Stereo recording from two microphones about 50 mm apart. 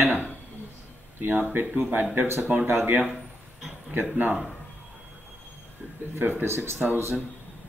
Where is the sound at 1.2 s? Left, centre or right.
Right.